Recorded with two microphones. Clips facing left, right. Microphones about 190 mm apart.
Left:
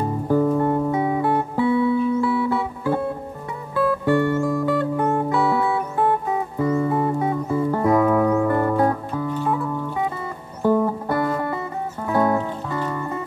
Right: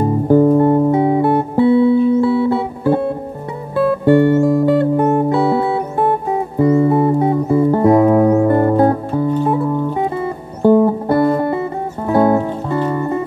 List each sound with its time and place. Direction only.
0.3 s music: 30° right (ahead or behind)
4.1 s music: 25° right (ahead or behind)